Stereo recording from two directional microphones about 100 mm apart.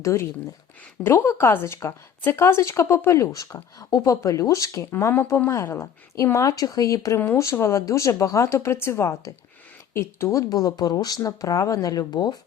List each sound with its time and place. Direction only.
0.0 s speech: 30° left (ahead or behind)